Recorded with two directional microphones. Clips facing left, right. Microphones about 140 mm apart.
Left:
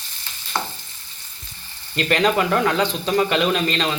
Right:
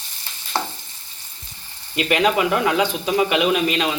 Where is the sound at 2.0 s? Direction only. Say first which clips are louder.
Right 1 dB; 10° right (ahead or behind).